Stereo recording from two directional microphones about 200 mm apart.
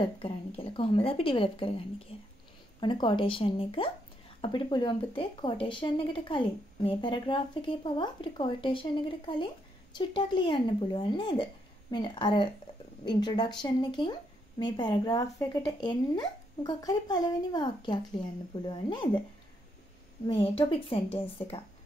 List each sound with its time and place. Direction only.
0.6 s speech: 25° left (ahead or behind)
20.2 s speech: 25° left (ahead or behind)